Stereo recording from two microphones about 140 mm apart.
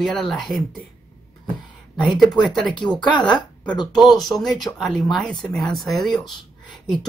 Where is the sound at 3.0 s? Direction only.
30° left (ahead or behind).